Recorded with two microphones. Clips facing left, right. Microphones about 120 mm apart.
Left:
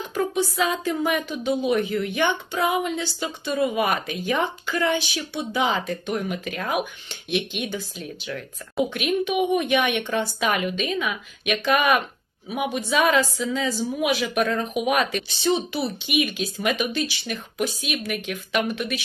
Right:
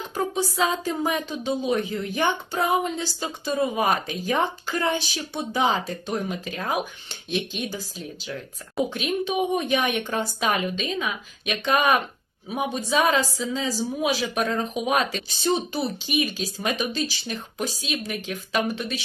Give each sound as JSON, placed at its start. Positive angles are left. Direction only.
{"t": 0.1, "sound": "a woman's voice", "side_deg": -30}